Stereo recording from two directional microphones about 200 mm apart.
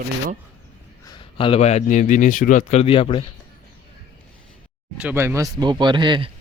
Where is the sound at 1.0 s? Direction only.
25° left (ahead or behind).